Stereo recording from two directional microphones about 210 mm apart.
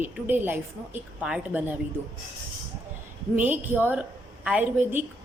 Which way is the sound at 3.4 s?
10° right (ahead or behind).